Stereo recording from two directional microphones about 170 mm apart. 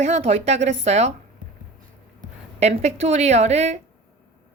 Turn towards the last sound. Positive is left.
turn(degrees=-40)  # may be behind; listen again after turning